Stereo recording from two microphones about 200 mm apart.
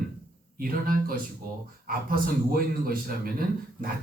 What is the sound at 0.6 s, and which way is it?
Speech, 45° right (ahead or behind).